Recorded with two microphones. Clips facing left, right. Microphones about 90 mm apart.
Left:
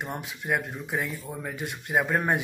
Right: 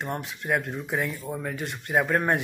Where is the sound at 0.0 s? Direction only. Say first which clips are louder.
Right 2 dB; 5° left (ahead or behind).